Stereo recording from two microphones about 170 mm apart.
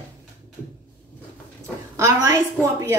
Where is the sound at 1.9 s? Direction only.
15° right (ahead or behind).